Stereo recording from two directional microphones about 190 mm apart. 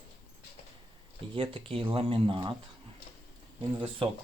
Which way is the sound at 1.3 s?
30° right (ahead or behind).